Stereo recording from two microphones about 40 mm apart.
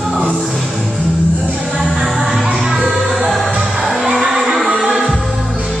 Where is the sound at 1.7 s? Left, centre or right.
Centre.